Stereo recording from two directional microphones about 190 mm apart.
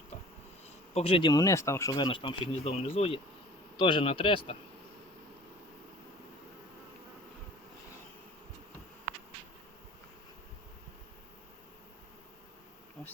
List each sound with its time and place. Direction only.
0.9 s speech: 30° left (ahead or behind)